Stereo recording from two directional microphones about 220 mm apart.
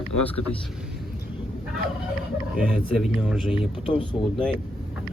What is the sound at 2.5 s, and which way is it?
Speech, centre (ahead or behind).